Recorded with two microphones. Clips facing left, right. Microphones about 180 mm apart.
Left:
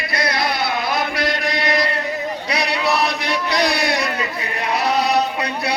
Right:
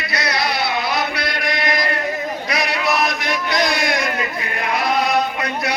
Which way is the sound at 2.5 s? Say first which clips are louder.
Left 1 dB; 35° left (ahead or behind).